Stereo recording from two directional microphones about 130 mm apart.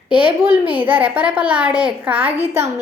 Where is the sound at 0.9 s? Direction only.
15° right (ahead or behind).